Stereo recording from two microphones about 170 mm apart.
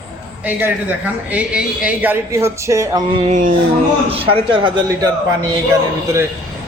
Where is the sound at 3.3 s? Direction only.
50° right (ahead or behind).